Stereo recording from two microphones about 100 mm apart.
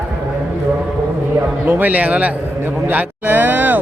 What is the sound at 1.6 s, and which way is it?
A man's voice, 15° right (ahead or behind).